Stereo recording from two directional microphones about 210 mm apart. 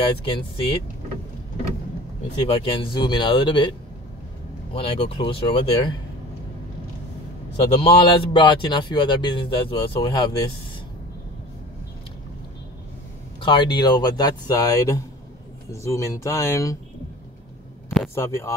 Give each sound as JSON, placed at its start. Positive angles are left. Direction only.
{"t": 0.2, "sound": "a man's voice", "side_deg": 25}
{"t": 2.3, "sound": "a man's voice", "side_deg": 25}
{"t": 4.7, "sound": "a man's voice", "side_deg": 25}
{"t": 7.6, "sound": "a man's voice", "side_deg": 25}
{"t": 13.4, "sound": "a man's voice", "side_deg": 20}
{"t": 17.8, "sound": "a sound", "side_deg": 0}
{"t": 18.1, "sound": "speech", "side_deg": 15}